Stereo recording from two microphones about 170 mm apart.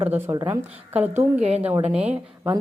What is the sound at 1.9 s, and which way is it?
Speech, 5° right (ahead or behind).